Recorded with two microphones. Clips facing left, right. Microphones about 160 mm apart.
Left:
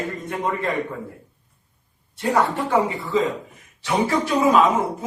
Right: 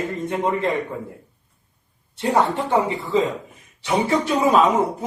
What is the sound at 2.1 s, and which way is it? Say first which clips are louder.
A man's voice: right 1 dB; 25° right (ahead or behind).